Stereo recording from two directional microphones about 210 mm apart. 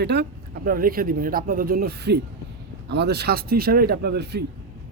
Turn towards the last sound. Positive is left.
turn(degrees=-50)  # may be behind; listen again after turning